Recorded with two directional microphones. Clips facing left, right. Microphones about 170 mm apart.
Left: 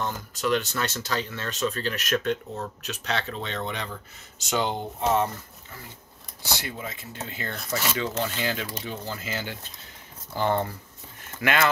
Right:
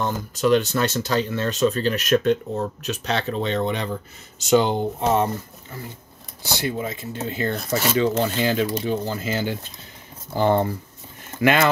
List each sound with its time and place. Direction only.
0.0 s speech: 25° right (ahead or behind)
6.5 s speech: 30° right (ahead or behind)